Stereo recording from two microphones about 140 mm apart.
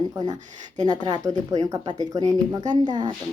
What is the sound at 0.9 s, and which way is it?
Speech, 30° right (ahead or behind).